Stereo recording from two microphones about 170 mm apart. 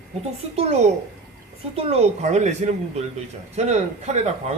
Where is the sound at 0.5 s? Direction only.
40° right (ahead or behind).